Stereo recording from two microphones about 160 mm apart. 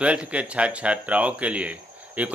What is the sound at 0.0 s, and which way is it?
Speech, 5° right (ahead or behind).